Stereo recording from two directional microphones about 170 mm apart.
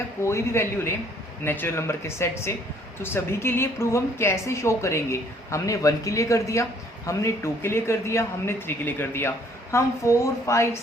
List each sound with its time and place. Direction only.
0.3 s a woman's voice: 15° left (ahead or behind)